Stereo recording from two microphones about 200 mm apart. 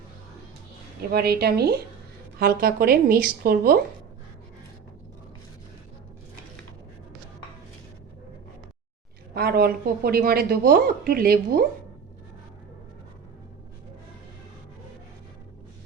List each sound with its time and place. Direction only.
1.1 s a woman's voice: 50° right (ahead or behind)
9.3 s a woman's voice: 50° right (ahead or behind)